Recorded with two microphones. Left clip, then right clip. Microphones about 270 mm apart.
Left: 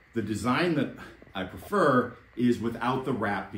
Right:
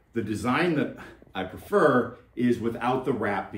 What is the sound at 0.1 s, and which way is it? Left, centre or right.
Speech, centre.